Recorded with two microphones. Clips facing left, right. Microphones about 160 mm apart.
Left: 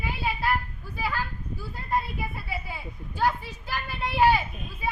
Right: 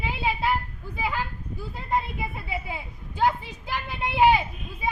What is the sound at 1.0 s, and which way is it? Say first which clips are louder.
A child's voice: right 1 dB; 20° right (ahead or behind).